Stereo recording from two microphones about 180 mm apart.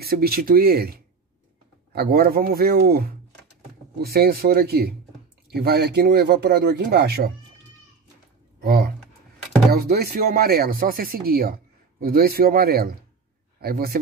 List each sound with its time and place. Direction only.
0.0 s speech: 60° right (ahead or behind)
8.6 s a sound: 60° right (ahead or behind)
9.7 s speech: 60° right (ahead or behind)